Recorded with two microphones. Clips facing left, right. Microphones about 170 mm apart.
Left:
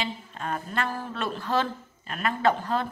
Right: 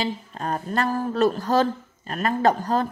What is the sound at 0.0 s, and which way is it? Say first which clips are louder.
Speech: right 5 dB; 40° right (ahead or behind).